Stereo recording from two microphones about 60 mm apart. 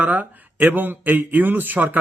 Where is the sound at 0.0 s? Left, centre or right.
Right.